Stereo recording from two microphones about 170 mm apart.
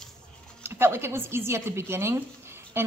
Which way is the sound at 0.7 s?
15° right (ahead or behind).